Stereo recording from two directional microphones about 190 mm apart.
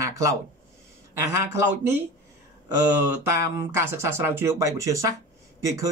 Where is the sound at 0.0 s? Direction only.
15° right (ahead or behind).